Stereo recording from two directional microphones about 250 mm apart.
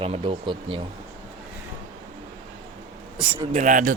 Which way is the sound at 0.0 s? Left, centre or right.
Right.